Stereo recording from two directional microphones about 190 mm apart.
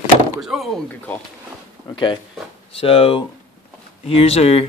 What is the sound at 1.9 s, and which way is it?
Speech, 25° left (ahead or behind).